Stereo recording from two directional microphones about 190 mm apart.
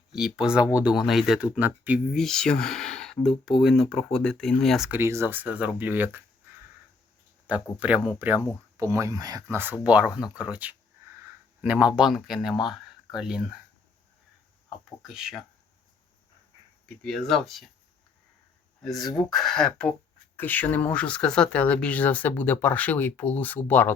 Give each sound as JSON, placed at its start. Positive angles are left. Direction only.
{"t": 0.1, "sound": "speech", "side_deg": -5}
{"t": 7.4, "sound": "speech", "side_deg": -5}
{"t": 15.0, "sound": "speech", "side_deg": 0}
{"t": 17.0, "sound": "speech", "side_deg": 5}
{"t": 18.8, "sound": "speech", "side_deg": 0}